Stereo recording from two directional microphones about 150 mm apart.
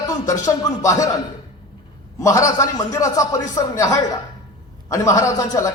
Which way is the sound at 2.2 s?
20° left (ahead or behind).